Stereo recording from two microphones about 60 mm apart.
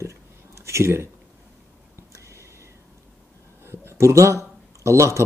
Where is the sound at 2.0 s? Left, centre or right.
Right.